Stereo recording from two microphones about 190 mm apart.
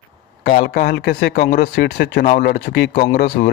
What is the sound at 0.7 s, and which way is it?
Speech, 55° left (ahead or behind).